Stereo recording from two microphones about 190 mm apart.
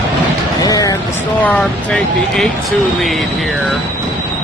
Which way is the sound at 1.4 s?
5° left (ahead or behind).